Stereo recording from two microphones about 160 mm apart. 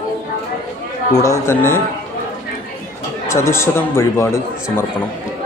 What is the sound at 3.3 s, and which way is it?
Speech, 15° left (ahead or behind).